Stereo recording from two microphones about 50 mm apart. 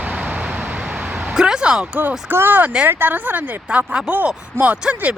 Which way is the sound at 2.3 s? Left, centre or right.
Right.